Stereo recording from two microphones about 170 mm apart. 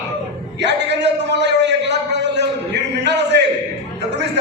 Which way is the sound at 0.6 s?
90° right.